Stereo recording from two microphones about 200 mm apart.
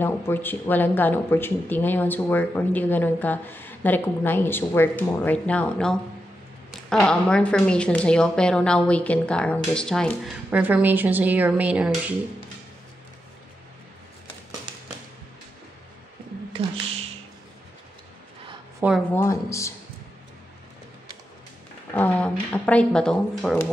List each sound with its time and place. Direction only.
0.0 s speech: 10° left (ahead or behind)
10.5 s a woman's voice: 10° right (ahead or behind)
16.5 s a sound: 25° right (ahead or behind)
18.8 s speech: 5° right (ahead or behind)
19.2 s speech: 15° left (ahead or behind)
21.9 s speech: 5° left (ahead or behind)